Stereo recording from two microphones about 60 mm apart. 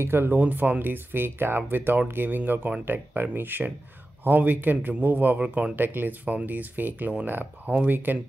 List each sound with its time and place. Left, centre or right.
0.0 s speech: right
0.4 s a man's voice: right